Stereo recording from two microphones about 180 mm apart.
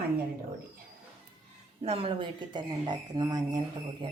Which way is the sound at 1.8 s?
30° right (ahead or behind).